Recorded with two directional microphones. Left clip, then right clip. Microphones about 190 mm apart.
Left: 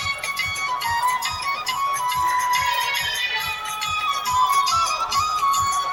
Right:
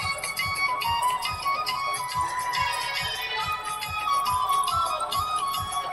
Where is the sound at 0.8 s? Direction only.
55° left (ahead or behind).